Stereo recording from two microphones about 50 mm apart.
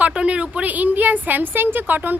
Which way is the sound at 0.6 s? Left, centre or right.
Right.